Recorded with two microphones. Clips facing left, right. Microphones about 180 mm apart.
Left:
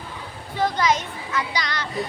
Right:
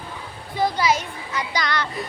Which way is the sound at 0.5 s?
10° right (ahead or behind).